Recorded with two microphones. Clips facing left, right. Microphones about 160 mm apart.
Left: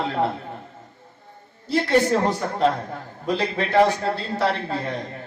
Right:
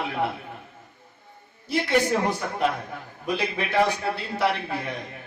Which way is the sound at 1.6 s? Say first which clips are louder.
Left 4 dB; 15° right (ahead or behind).